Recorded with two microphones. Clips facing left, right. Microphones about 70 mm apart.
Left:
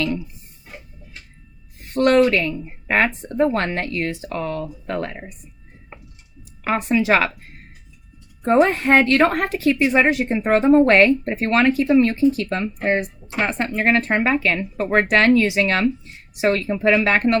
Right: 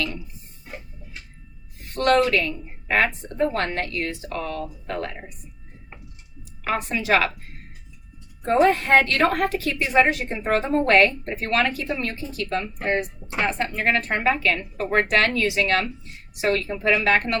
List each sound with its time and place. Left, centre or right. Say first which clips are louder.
2.0 s speech: left 4 dB; left
6.7 s speech: left 4 dB; left
8.4 s speech: left 2 dB; left
14.8 s speech: left 5 dB; centre